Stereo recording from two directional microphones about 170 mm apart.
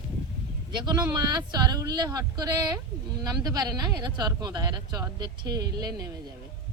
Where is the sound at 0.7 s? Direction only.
25° right (ahead or behind).